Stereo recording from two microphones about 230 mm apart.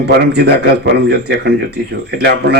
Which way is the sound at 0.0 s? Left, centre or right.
Right.